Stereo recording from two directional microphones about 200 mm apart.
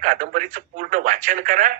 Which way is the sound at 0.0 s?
40° right (ahead or behind).